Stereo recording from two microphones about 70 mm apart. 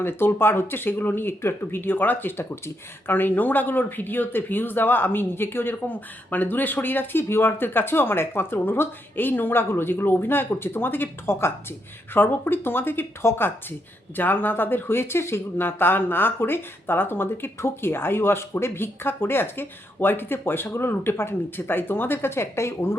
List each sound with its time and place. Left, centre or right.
0.0 s speech: left